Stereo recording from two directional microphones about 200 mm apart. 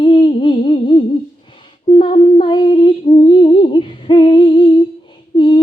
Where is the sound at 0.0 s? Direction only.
25° left (ahead or behind).